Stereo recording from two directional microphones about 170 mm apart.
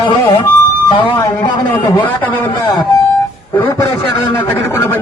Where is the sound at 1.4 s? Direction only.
25° left (ahead or behind).